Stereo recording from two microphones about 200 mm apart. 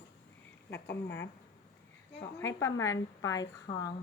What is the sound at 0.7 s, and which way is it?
Speech, 60° left (ahead or behind).